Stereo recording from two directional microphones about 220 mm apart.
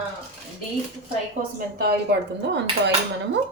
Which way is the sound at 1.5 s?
45° right (ahead or behind).